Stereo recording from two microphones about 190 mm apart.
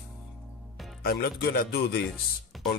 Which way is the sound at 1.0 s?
55° left (ahead or behind).